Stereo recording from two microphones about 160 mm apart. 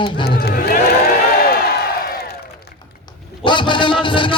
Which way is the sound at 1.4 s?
75° left (ahead or behind).